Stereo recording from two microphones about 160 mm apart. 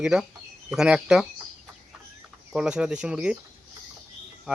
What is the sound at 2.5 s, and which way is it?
Speech, 5° right (ahead or behind).